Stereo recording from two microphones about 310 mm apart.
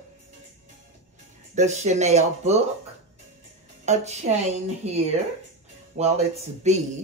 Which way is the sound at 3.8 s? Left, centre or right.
Right.